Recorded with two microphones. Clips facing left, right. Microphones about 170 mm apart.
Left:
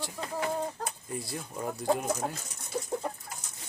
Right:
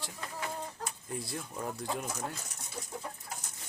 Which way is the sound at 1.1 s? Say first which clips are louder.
Left 1 dB; centre (ahead or behind).